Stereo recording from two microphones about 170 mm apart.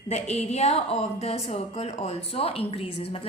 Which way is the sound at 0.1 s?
40° left (ahead or behind).